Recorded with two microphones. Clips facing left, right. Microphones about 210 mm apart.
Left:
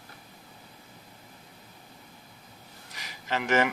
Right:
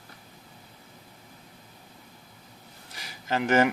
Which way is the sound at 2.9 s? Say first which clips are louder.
Right 3 dB; 35° right (ahead or behind).